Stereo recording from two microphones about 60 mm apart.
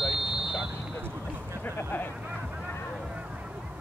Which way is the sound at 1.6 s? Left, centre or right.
Left.